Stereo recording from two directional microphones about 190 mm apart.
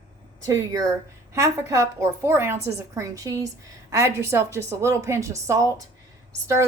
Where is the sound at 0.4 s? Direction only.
15° right (ahead or behind).